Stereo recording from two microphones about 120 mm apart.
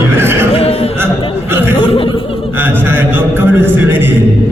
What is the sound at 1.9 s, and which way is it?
Laughter, 50° left (ahead or behind).